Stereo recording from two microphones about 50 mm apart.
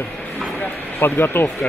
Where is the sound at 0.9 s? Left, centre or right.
Left.